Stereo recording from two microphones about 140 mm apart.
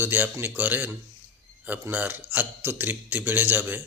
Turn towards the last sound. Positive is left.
turn(degrees=-15)  # may be behind; listen again after turning